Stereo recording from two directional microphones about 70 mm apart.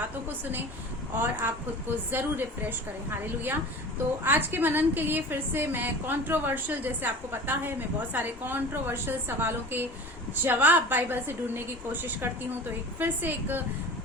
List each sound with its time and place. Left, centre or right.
1.1 s a woman's voice: right
4.2 s a woman's voice: right